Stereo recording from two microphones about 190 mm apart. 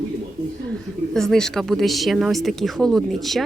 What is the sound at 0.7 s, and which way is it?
A woman's voice, centre (ahead or behind).